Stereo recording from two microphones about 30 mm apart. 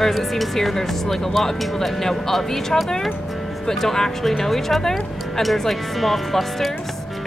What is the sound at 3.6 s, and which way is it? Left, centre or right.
Speech, centre.